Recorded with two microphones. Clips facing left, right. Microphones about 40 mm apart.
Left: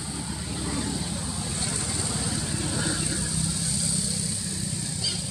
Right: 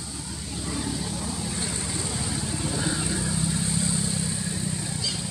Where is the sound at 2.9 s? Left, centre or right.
Centre.